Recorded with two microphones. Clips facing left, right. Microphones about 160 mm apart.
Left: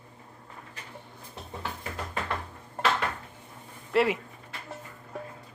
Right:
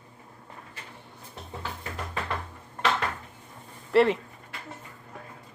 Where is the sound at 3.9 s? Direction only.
5° left (ahead or behind).